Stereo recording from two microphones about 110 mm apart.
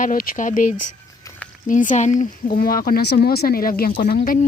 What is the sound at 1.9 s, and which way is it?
Speech, 90° left.